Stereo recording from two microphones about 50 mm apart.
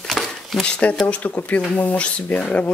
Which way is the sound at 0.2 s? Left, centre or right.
Centre.